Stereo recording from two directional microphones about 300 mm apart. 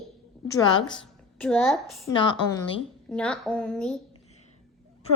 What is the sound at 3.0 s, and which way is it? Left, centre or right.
Speech, centre.